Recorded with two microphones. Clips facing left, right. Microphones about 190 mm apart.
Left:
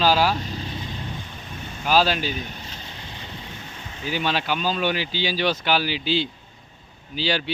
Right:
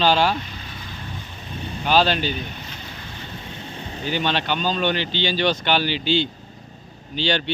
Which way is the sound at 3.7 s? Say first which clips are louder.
Right 6 dB; 35° right (ahead or behind).